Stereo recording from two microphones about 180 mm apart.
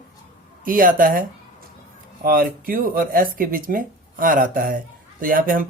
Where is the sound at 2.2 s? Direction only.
50° right (ahead or behind).